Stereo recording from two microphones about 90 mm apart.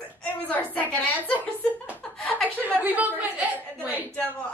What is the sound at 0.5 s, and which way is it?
Speech, 15° left (ahead or behind).